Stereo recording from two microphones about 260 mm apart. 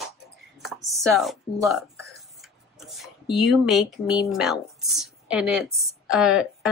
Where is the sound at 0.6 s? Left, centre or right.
Centre.